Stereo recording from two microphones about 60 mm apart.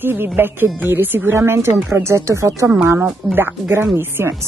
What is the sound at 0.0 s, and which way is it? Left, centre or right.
Speech, right.